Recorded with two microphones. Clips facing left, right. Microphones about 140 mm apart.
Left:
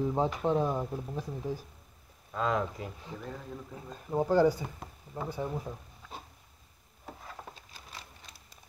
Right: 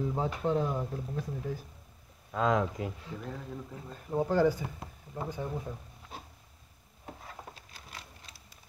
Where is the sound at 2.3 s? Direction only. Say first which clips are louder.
Right 3 dB; 90° right.